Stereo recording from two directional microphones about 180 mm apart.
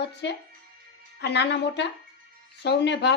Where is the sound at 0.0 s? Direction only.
70° left (ahead or behind).